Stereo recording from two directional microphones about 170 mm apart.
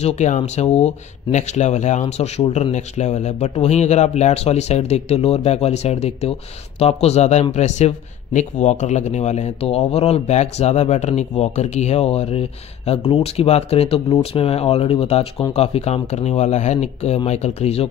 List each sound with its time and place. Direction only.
0.0 s speech: 40° left (ahead or behind)